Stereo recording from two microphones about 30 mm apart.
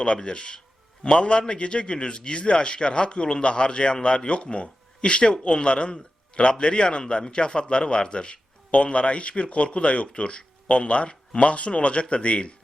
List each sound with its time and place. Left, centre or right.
0.2 s a man's voice: left